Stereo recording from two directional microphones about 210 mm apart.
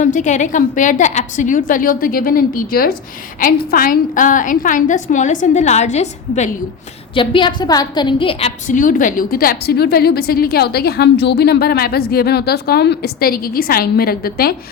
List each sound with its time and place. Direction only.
0.0 s a woman's voice: 35° left (ahead or behind)
7.2 s a woman's voice: 20° left (ahead or behind); by 14.5 s 45° left (ahead or behind)